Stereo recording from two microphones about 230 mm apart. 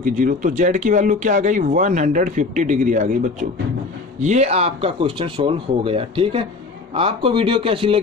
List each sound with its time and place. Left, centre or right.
0.0 s speech: right